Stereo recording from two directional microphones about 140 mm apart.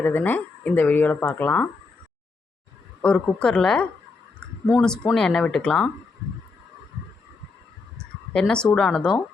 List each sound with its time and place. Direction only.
0.0 s speech: 15° left (ahead or behind)
3.0 s speech: 5° left (ahead or behind)
8.3 s speech: 5° left (ahead or behind)